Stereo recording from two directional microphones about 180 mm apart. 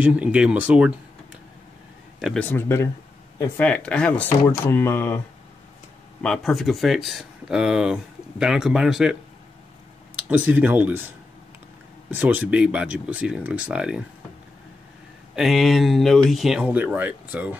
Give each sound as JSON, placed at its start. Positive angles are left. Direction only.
{"t": 0.0, "sound": "speech", "side_deg": -5}
{"t": 2.1, "sound": "speech", "side_deg": 0}
{"t": 2.4, "sound": "speech", "side_deg": 10}
{"t": 6.2, "sound": "speech", "side_deg": 0}
{"t": 10.2, "sound": "speech", "side_deg": -10}
{"t": 12.1, "sound": "speech", "side_deg": -10}
{"t": 15.3, "sound": "speech", "side_deg": 0}